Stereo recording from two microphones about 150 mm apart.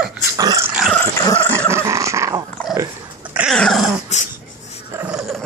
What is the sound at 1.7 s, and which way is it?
Dog, 20° right (ahead or behind).